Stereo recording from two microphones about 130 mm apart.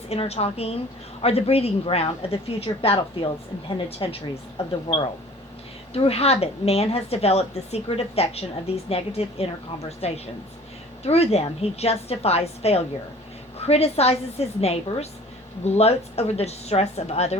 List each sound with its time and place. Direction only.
0.1 s a woman's voice: 50° left (ahead or behind)
4.9 s speech: 35° left (ahead or behind)
5.9 s a woman's voice: 50° left (ahead or behind)